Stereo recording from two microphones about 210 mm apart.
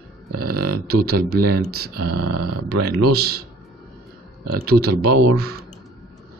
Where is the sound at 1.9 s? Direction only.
90° right.